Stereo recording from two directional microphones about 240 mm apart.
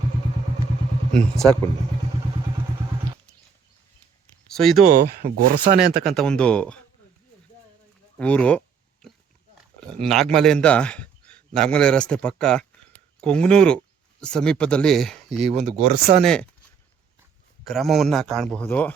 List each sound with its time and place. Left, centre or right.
1.1 s a man's voice: centre
4.5 s speech: centre
4.8 s speech: right
6.1 s a man's voice: centre
8.2 s a sound: centre
10.0 s a man's voice: centre
15.4 s speech: right
16.2 s a man's voice: centre
17.7 s a man's voice: centre